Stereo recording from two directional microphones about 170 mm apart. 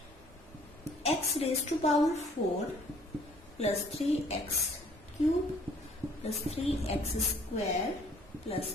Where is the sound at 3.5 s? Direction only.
40° left (ahead or behind).